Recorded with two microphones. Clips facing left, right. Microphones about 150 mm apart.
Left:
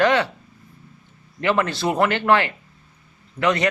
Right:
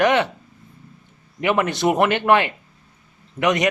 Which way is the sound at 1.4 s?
15° right (ahead or behind).